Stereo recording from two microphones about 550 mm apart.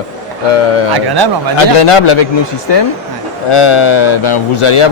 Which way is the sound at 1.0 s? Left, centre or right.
Right.